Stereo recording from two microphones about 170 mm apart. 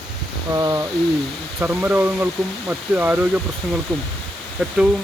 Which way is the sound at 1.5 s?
10° right (ahead or behind).